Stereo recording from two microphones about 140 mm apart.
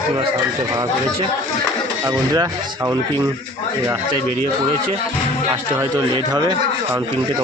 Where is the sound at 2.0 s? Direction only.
25° right (ahead or behind).